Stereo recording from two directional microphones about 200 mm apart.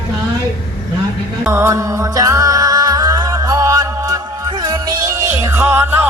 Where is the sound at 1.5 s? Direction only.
15° right (ahead or behind).